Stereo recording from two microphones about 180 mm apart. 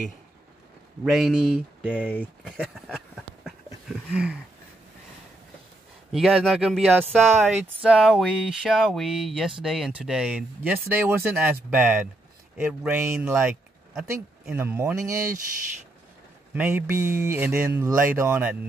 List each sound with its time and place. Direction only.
1.0 s speech: centre (ahead or behind)
1.9 s speech: 5° left (ahead or behind)
4.1 s speech: 5° right (ahead or behind)
6.1 s speech: centre (ahead or behind); by 15.3 s 15° right (ahead or behind)
16.5 s speech: 10° right (ahead or behind)